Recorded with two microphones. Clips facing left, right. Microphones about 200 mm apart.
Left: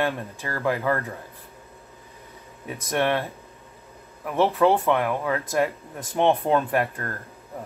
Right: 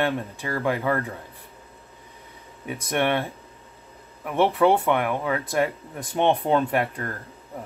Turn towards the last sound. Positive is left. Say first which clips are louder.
# even
turn(degrees=-15)  # may be behind; listen again after turning